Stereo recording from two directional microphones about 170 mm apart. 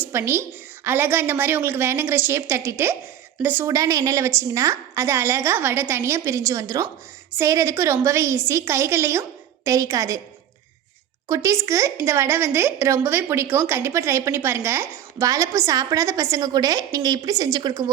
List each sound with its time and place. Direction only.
0.0 s a woman's voice: 15° right (ahead or behind)
11.3 s a woman's voice: 20° right (ahead or behind)